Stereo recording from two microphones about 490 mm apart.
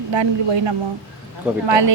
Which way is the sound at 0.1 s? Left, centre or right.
Right.